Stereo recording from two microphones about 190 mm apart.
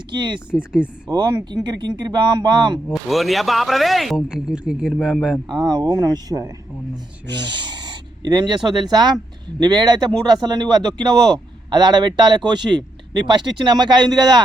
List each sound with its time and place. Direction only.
0.1 s a man's voice: 25° right (ahead or behind)
0.5 s speech: 5° right (ahead or behind)
1.0 s a man's voice: 20° right (ahead or behind)
2.9 s speech: centre (ahead or behind)
5.5 s a man's voice: 20° right (ahead or behind)